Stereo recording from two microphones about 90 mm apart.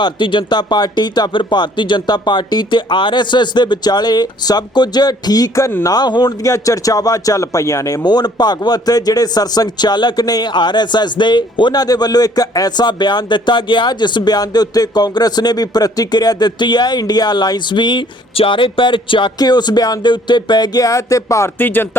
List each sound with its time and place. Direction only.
0.0 s a man's voice: 65° left (ahead or behind)
6.4 s speech: 40° left (ahead or behind)
8.0 s a man's voice: 50° left (ahead or behind); by 19.3 s 70° left (ahead or behind)
19.4 s a man's voice: 50° left (ahead or behind); by 21.5 s 35° left (ahead or behind)
21.6 s speech: 20° left (ahead or behind)